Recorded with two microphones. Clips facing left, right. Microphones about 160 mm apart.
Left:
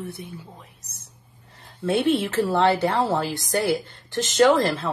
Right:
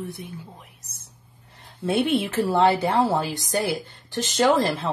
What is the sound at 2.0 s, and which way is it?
A woman's voice, 10° right (ahead or behind).